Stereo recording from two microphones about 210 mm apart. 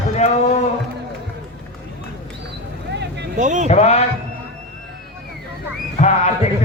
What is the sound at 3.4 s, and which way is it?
Speech, 35° right (ahead or behind).